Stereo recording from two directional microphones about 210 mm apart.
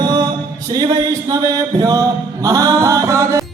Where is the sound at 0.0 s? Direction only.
20° right (ahead or behind).